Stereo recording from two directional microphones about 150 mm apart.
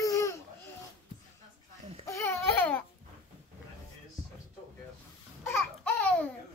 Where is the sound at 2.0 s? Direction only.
15° left (ahead or behind).